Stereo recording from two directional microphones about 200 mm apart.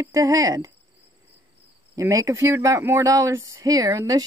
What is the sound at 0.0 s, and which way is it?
Speech, 15° right (ahead or behind).